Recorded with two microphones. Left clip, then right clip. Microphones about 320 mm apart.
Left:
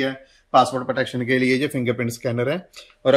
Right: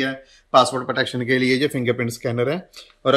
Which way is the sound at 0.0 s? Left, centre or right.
Centre.